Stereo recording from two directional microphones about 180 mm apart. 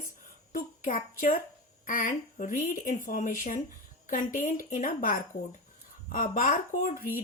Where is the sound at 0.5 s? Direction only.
50° left (ahead or behind).